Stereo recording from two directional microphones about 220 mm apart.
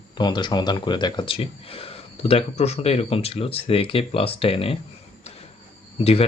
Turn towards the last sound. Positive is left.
turn(degrees=25)  # may be behind; listen again after turning